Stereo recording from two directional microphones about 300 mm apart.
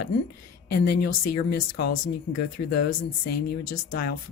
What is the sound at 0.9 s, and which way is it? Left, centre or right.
Speech, left.